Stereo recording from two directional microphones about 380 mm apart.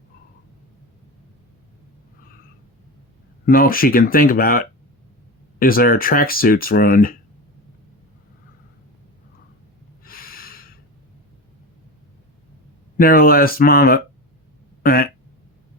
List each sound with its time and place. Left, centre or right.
3.4 s speech: left
10.0 s snort: left
13.0 s speech: left